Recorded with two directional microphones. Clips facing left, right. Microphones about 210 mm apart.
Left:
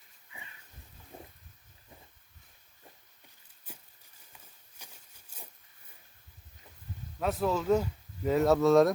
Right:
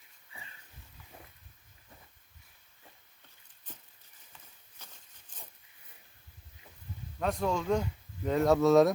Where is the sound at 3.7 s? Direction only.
10° left (ahead or behind).